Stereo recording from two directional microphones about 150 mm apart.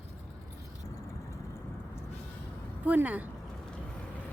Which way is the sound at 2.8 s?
10° right (ahead or behind).